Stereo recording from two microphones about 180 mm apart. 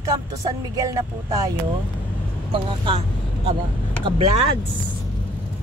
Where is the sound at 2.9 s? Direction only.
30° right (ahead or behind).